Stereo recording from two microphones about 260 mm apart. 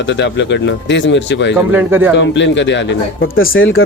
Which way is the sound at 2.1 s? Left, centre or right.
Left.